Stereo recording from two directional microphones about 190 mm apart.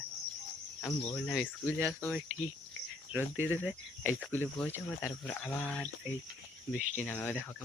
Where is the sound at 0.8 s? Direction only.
5° left (ahead or behind).